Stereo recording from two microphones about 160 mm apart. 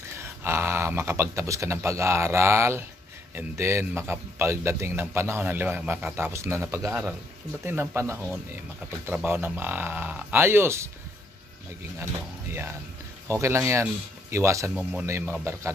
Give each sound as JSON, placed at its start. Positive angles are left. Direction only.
{"t": 0.2, "sound": "speech", "side_deg": -15}
{"t": 13.3, "sound": "speech", "side_deg": -15}
{"t": 14.8, "sound": "speech", "side_deg": -5}